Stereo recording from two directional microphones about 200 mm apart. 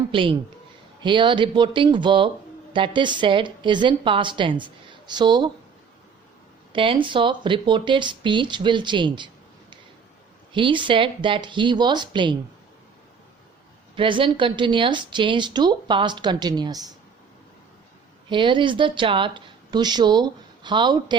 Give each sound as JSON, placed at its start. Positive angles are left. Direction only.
{"t": 0.1, "sound": "speech", "side_deg": -25}
{"t": 6.7, "sound": "speech", "side_deg": -25}
{"t": 13.9, "sound": "speech", "side_deg": -25}
{"t": 18.3, "sound": "speech", "side_deg": -25}